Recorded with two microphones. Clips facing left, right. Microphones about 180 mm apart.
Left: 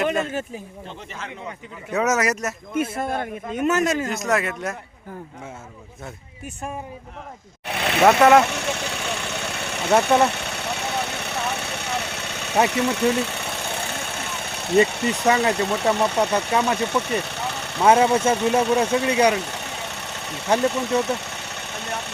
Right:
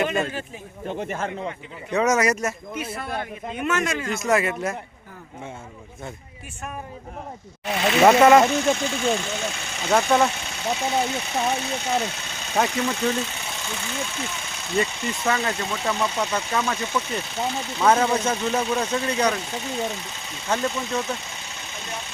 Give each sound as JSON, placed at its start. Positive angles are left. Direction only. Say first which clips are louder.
{"t": 0.0, "sound": "a sound", "louder": "left 1 dB", "side_deg": 0}
{"t": 0.9, "sound": "speech", "louder": "right 13 dB", "side_deg": -50}
{"t": 1.9, "sound": "speech", "louder": "right 1 dB", "side_deg": 5}
{"t": 2.7, "sound": "a man's voice", "louder": "left 5 dB", "side_deg": 50}
{"t": 4.1, "sound": "speech", "louder": "right 1 dB", "side_deg": 0}
{"t": 7.7, "sound": "speech", "louder": "right 3 dB", "side_deg": 60}
{"t": 8.2, "sound": "speech", "louder": "even", "side_deg": 0}
{"t": 8.4, "sound": "speech", "louder": "right 5 dB", "side_deg": 70}
{"t": 12.6, "sound": "vehicle", "louder": "left 4 dB", "side_deg": 65}
{"t": 14.8, "sound": "speech", "louder": "left 5 dB", "side_deg": 70}
{"t": 19.3, "sound": "sewing machine", "louder": "left 2 dB", "side_deg": 65}
{"t": 20.6, "sound": "engine", "louder": "left 5 dB", "side_deg": 65}